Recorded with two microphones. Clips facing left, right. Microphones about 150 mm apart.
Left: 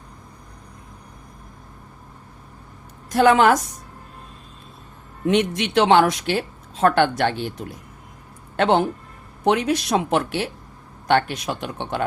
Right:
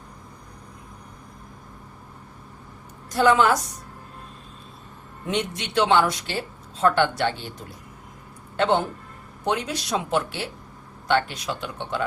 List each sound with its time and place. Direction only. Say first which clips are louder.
3.2 s speech: left 4 dB; 65° left (ahead or behind)
5.3 s a woman's voice: left 6 dB; 80° left; by 12.0 s 60° left (ahead or behind)